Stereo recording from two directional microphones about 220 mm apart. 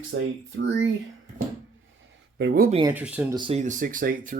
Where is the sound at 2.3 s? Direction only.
45° right (ahead or behind).